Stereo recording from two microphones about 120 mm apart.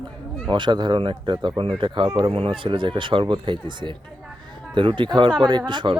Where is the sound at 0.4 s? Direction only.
40° right (ahead or behind).